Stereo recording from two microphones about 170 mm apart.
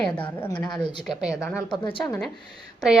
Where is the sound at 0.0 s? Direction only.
10° left (ahead or behind).